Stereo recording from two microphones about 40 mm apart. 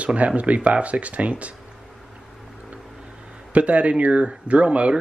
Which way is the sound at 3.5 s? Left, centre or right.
Right.